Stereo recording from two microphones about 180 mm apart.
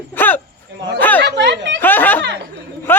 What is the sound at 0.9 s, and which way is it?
Chatter, 10° left (ahead or behind).